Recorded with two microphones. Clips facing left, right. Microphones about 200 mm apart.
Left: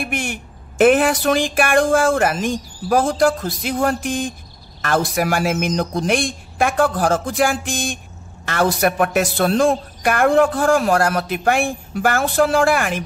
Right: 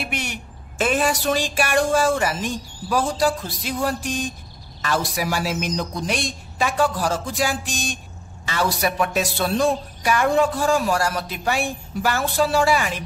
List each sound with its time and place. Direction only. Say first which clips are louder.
0.0 s a man's voice: left 4 dB; 50° left (ahead or behind)